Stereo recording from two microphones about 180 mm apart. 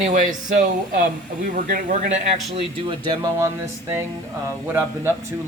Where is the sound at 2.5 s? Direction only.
25° right (ahead or behind).